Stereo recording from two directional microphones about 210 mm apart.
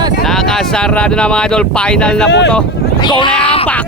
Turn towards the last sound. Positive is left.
turn(degrees=20)  # may be behind; listen again after turning